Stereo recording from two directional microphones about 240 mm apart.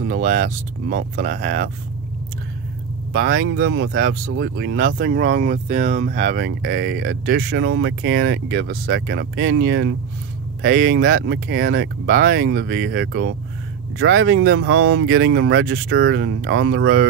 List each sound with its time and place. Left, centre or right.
0.0 s speech: right
3.1 s speech: right
4.8 s speech: right